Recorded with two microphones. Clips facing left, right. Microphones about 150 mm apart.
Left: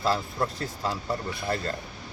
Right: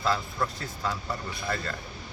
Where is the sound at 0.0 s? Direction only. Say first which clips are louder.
Left 2 dB; 35° left (ahead or behind).